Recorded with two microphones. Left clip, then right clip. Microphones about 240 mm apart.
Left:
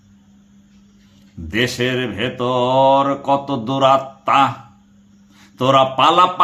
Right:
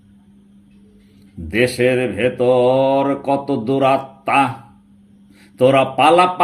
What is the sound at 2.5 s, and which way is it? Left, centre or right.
Speech, left.